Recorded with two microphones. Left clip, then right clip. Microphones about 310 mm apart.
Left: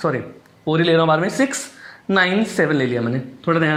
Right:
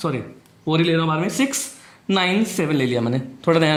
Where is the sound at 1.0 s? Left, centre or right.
Centre.